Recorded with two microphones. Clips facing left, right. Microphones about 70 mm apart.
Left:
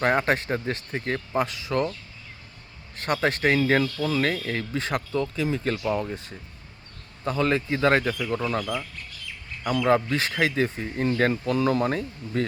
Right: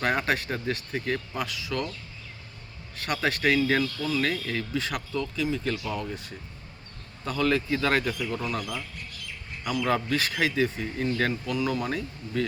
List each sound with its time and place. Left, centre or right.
0.0 s speech: left
2.9 s speech: left